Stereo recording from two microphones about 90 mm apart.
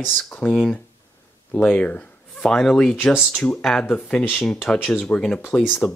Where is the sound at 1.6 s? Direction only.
15° left (ahead or behind).